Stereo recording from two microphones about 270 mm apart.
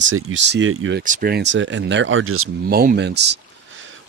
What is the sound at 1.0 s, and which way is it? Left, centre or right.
Speech, right.